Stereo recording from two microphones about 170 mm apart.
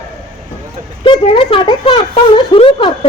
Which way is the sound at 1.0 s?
30° left (ahead or behind).